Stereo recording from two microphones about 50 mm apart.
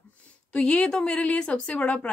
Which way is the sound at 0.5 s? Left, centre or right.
Left.